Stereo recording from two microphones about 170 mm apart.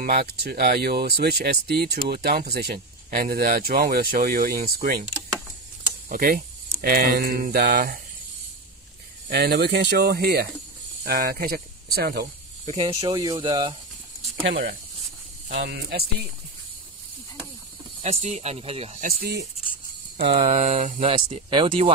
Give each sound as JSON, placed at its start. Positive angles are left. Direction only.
{"t": 0.0, "sound": "speech", "side_deg": -65}
{"t": 6.0, "sound": "speech", "side_deg": -60}
{"t": 9.3, "sound": "speech", "side_deg": -70}
{"t": 12.7, "sound": "speech", "side_deg": -30}
{"t": 15.6, "sound": "speech", "side_deg": -70}
{"t": 18.0, "sound": "speech", "side_deg": -40}
{"t": 18.9, "sound": "speech", "side_deg": -60}
{"t": 20.2, "sound": "a sound", "side_deg": -75}
{"t": 20.4, "sound": "speech", "side_deg": -40}
{"t": 21.5, "sound": "speech", "side_deg": -30}